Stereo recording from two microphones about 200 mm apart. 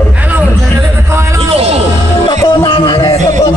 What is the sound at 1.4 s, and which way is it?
Vehicle, 30° right (ahead or behind).